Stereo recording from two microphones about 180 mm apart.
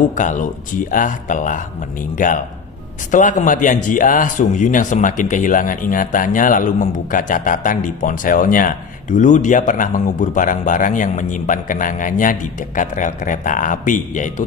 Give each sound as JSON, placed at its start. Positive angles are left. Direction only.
{"t": 0.1, "sound": "a man's voice", "side_deg": 45}